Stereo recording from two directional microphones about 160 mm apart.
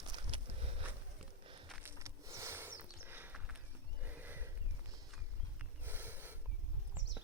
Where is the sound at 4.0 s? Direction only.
10° right (ahead or behind).